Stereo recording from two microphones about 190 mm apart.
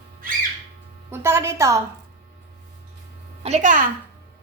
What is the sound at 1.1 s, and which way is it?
Speech, 15° right (ahead or behind).